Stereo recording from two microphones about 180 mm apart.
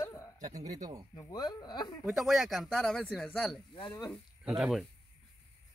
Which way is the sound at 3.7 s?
25° left (ahead or behind).